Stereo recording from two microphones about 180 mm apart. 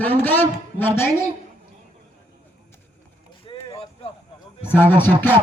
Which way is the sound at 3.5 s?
25° left (ahead or behind).